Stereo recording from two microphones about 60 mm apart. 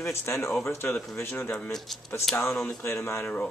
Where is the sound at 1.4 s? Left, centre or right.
Left.